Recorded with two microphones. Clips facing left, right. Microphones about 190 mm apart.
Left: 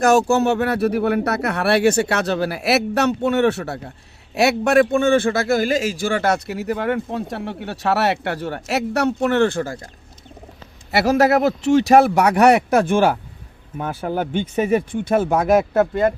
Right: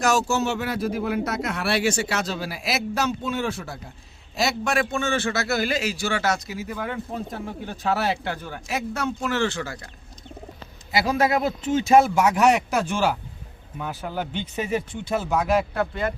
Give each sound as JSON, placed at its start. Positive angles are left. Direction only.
{"t": 0.0, "sound": "a man's voice", "side_deg": 55}
{"t": 10.9, "sound": "a man's voice", "side_deg": 75}